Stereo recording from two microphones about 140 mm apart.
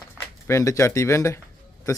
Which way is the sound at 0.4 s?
20° left (ahead or behind).